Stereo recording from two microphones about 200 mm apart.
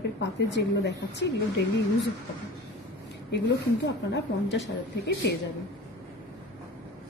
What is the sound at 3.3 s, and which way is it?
A woman's voice, 60° left (ahead or behind).